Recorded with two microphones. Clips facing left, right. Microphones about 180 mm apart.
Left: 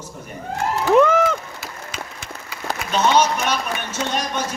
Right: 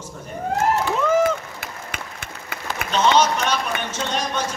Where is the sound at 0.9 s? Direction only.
65° left (ahead or behind).